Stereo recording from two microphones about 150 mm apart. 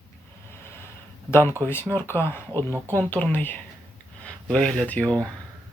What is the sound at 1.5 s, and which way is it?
Speech, 15° left (ahead or behind).